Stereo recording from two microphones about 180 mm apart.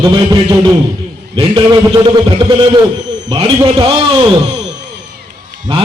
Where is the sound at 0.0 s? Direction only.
25° right (ahead or behind).